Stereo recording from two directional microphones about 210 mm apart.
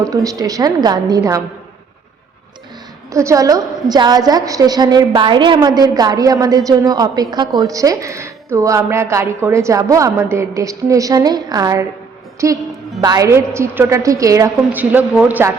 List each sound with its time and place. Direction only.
0.1 s a woman's voice: 15° right (ahead or behind)
3.1 s a woman's voice: 15° right (ahead or behind)